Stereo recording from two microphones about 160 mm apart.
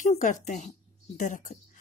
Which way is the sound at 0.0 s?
55° left (ahead or behind).